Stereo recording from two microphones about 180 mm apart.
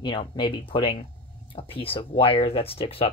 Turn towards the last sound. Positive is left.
turn(degrees=30)  # may be behind; listen again after turning